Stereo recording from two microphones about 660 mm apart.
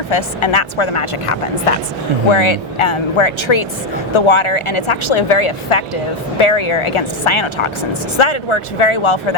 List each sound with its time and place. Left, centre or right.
0.1 s speech: left